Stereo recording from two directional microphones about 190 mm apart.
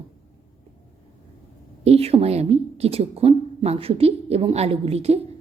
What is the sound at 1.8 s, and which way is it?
Speech, 30° right (ahead or behind).